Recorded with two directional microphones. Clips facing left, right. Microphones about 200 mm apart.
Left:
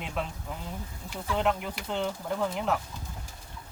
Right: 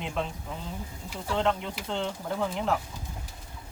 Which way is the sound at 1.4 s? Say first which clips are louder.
Right 1 dB; 5° left (ahead or behind).